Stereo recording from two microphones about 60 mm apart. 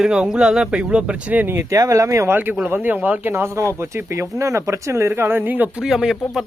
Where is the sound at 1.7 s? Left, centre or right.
Right.